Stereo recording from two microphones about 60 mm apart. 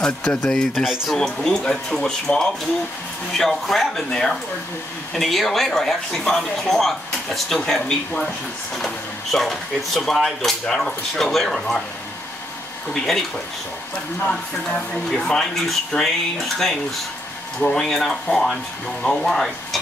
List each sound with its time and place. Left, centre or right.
0.0 s speech: centre
0.4 s speech: centre
1.1 s speech: centre
12.9 s speech: centre
15.0 s speech: centre